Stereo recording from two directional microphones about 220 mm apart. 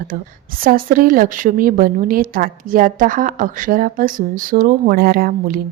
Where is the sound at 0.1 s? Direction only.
40° right (ahead or behind).